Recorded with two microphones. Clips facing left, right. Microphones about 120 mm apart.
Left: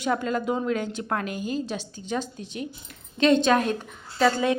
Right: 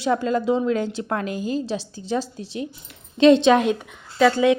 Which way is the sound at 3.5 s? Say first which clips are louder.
Right 5 dB; 20° right (ahead or behind).